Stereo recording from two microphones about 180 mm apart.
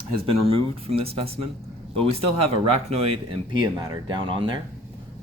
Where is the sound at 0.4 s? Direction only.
30° right (ahead or behind).